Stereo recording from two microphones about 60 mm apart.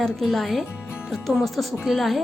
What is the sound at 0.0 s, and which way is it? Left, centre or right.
Speech, centre.